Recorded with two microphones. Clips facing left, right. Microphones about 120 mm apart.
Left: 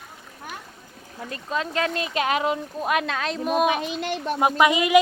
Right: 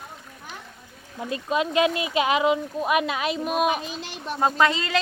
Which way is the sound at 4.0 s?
55° left (ahead or behind).